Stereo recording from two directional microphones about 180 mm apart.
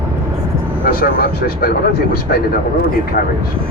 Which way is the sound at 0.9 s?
55° left (ahead or behind).